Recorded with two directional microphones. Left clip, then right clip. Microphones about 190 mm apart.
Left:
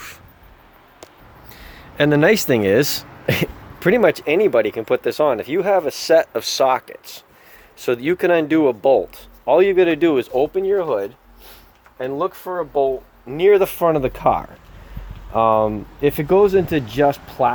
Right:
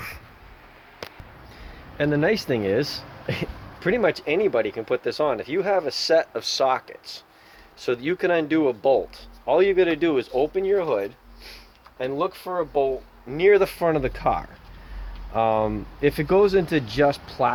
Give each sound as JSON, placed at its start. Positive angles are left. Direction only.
{"t": 2.0, "sound": "speech", "side_deg": 45}